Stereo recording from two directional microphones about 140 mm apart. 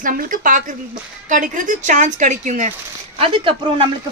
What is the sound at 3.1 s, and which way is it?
Speech, 40° right (ahead or behind).